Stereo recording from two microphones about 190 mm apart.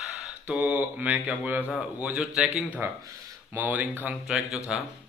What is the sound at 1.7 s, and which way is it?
Speech, 5° right (ahead or behind).